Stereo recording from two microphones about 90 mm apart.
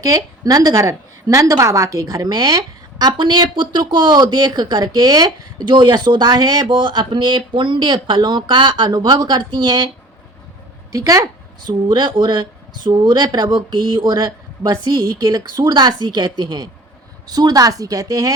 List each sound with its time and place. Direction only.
0.0 s a woman's voice: 40° right (ahead or behind)
6.7 s speech: 60° right (ahead or behind)
10.9 s a woman's voice: 40° right (ahead or behind)
11.7 s speech: 50° right (ahead or behind)